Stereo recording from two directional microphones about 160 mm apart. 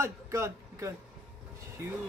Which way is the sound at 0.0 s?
15° right (ahead or behind).